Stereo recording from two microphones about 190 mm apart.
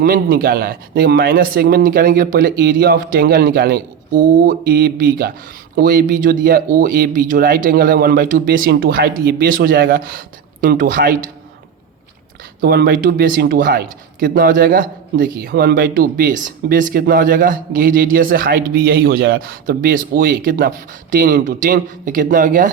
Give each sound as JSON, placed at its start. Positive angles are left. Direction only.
{"t": 0.0, "sound": "speech", "side_deg": -50}
{"t": 12.5, "sound": "speech", "side_deg": -55}